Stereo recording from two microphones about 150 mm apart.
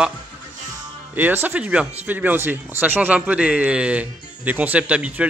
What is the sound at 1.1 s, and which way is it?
Speech, 10° right (ahead or behind).